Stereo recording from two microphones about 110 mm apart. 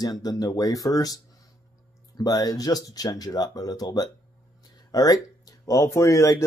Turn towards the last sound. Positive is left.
turn(degrees=25)  # may be behind; listen again after turning